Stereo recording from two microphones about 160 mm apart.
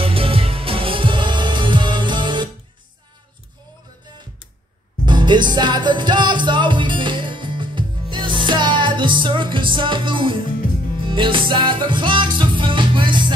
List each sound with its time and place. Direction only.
0.0 s music: 35° right (ahead or behind)
5.0 s music: 30° right (ahead or behind)